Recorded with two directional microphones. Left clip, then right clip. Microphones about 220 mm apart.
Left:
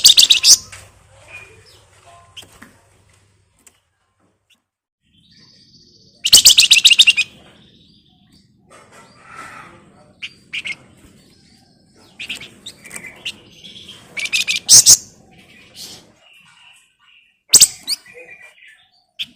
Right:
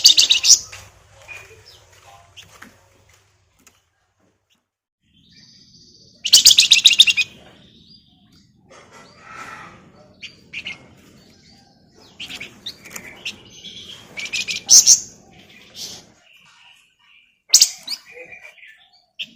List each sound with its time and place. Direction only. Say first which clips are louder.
0.0 s bird: left 3 dB; 25° left (ahead or behind)
6.2 s bird: left 2 dB; 25° left (ahead or behind)
10.2 s bird: left 6 dB; 30° left (ahead or behind)
13.2 s bird: left 2 dB; 15° left (ahead or behind)
14.2 s bird: left 6 dB; 30° left (ahead or behind)
17.5 s bird: left 2 dB; 30° left (ahead or behind)